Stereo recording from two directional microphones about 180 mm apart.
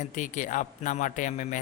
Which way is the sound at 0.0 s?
45° left (ahead or behind).